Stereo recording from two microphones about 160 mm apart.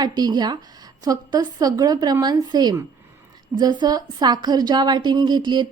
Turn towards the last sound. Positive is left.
turn(degrees=-25)  # may be behind; listen again after turning